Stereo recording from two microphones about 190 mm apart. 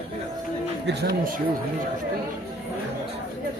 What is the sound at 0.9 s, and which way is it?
Speech, 60° right (ahead or behind).